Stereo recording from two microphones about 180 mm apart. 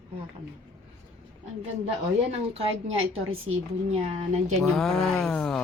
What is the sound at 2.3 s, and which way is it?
Speech, 35° right (ahead or behind).